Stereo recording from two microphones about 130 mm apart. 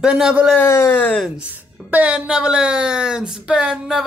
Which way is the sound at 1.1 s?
5° right (ahead or behind).